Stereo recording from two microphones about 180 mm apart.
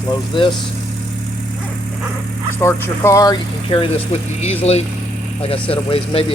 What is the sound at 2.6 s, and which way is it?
Speech, 15° left (ahead or behind).